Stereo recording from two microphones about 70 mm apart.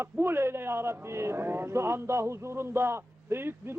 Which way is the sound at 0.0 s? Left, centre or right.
Right.